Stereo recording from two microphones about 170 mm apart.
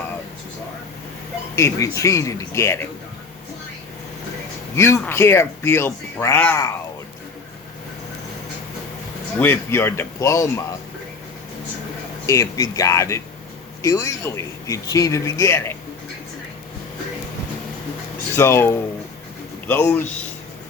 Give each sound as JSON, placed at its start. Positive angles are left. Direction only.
{"t": 1.5, "sound": "speech", "side_deg": 15}
{"t": 4.7, "sound": "speech", "side_deg": 15}
{"t": 9.4, "sound": "speech", "side_deg": 15}
{"t": 12.2, "sound": "speech", "side_deg": 20}
{"t": 18.3, "sound": "speech", "side_deg": 15}